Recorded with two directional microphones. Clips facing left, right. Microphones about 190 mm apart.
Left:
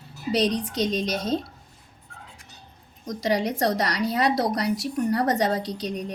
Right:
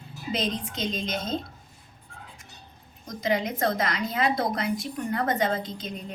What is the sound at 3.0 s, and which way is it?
A woman's voice, 40° left (ahead or behind).